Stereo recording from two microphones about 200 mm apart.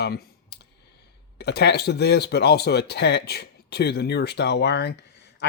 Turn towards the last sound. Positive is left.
turn(degrees=55)  # may be behind; listen again after turning